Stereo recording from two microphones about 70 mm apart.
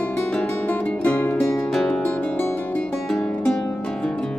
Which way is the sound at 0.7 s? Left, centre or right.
Left.